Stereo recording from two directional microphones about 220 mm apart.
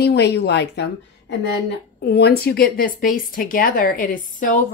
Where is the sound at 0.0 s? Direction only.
50° left (ahead or behind).